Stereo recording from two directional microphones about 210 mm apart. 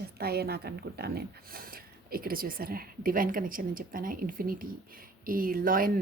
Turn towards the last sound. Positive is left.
turn(degrees=-40)  # may be behind; listen again after turning